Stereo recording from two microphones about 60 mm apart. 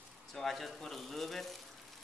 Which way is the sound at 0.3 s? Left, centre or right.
Centre.